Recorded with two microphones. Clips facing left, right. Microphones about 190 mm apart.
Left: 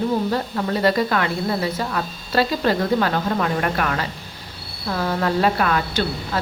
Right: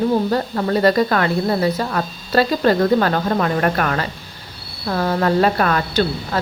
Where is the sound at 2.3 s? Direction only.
45° right (ahead or behind).